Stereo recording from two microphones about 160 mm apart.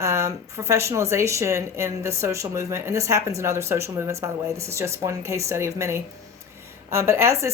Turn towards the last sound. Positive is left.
turn(degrees=-15)  # may be behind; listen again after turning